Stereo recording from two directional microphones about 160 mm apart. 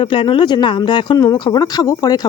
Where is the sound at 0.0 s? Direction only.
35° left (ahead or behind).